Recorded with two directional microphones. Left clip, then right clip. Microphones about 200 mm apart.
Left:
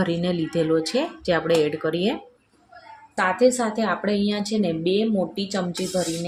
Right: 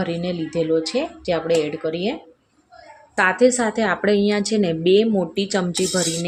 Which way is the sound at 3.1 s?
25° right (ahead or behind).